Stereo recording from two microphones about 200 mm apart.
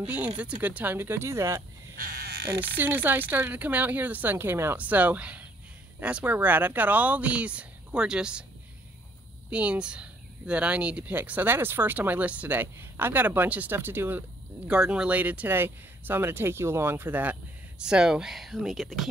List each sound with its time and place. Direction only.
0.0 s speech: 5° right (ahead or behind)
2.0 s crow: 50° right (ahead or behind)
2.8 s speech: 10° right (ahead or behind)
9.5 s speech: 5° right (ahead or behind)